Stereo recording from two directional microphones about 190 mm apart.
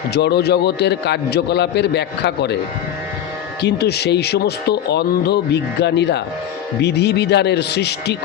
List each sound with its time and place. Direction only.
0.1 s speech: 60° left (ahead or behind)
3.6 s speech: 60° left (ahead or behind)